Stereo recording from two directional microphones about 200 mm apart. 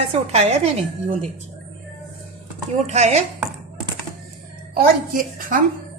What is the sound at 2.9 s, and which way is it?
Speech, 35° right (ahead or behind).